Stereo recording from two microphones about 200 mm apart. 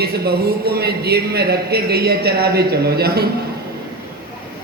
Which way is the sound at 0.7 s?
50° right (ahead or behind).